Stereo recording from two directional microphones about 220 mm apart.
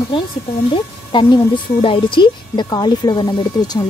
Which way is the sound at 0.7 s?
25° left (ahead or behind).